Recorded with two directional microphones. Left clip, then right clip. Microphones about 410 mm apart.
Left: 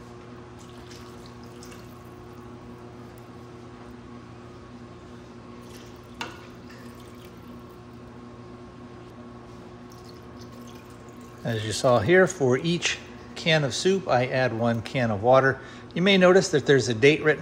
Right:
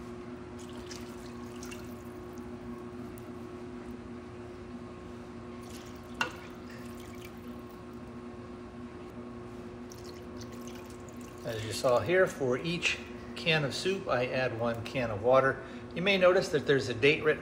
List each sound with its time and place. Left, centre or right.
11.4 s speech: left